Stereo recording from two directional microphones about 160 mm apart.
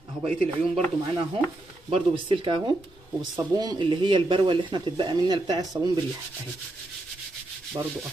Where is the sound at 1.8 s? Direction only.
35° right (ahead or behind).